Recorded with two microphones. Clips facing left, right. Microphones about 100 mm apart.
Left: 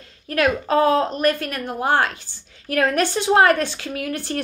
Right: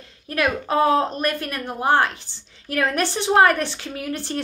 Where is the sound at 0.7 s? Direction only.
20° right (ahead or behind).